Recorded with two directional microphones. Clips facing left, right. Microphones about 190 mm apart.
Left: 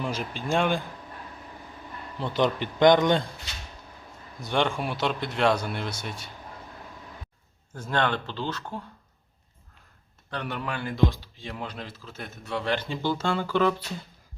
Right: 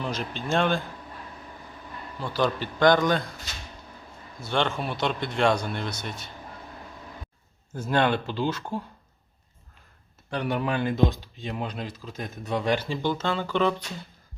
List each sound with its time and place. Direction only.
0.0 s speech: 10° left (ahead or behind)
2.2 s a man's voice: 20° left (ahead or behind)
4.4 s speech: 15° left (ahead or behind)
7.7 s speech: 10° right (ahead or behind)
10.2 s speech: 10° right (ahead or behind)
13.1 s speech: 10° left (ahead or behind)